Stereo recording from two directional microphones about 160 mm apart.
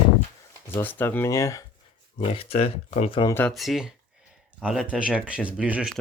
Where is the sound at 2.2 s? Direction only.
35° left (ahead or behind).